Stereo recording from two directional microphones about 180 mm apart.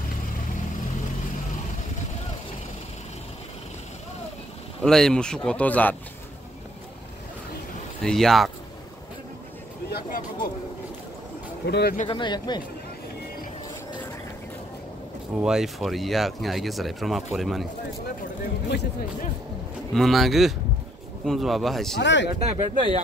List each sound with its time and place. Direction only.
4.8 s speech: 5° left (ahead or behind)
8.0 s speech: centre (ahead or behind)
9.8 s speech: 60° left (ahead or behind)
11.6 s speech: 65° left (ahead or behind)
12.1 s speech: 25° left (ahead or behind)
15.4 s speech: centre (ahead or behind)
19.9 s speech: centre (ahead or behind)
21.9 s speech: 80° left
22.3 s speech: 30° right (ahead or behind)